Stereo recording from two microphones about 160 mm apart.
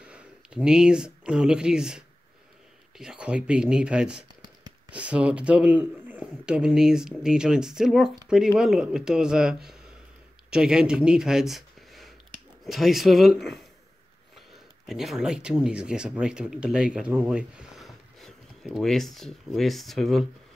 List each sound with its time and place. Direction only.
0.0 s speech: 5° right (ahead or behind)
14.9 s speech: centre (ahead or behind)